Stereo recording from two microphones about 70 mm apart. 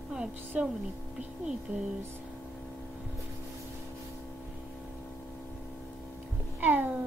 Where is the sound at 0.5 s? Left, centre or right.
Centre.